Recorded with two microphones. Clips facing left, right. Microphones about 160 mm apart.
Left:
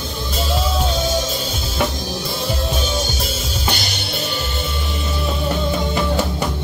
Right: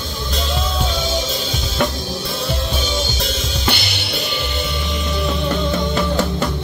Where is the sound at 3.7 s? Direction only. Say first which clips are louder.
Right 2 dB; 45° left (ahead or behind).